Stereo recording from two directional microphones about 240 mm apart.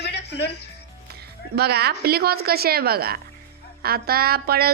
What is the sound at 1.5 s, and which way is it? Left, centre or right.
Speech, right.